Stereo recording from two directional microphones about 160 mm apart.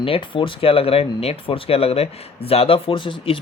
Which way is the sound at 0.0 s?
35° left (ahead or behind).